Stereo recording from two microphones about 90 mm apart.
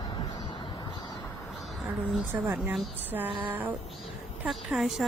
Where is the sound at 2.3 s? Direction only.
25° right (ahead or behind).